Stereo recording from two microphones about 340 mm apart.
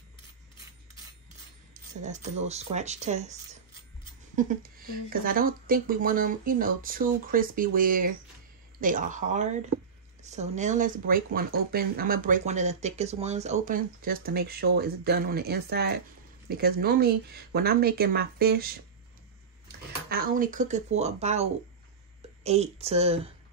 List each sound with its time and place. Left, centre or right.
1.7 s speech: right
4.4 s speech: right
20.1 s speech: right